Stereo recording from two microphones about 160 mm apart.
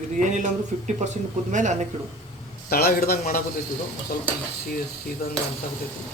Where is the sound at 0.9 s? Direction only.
50° right (ahead or behind).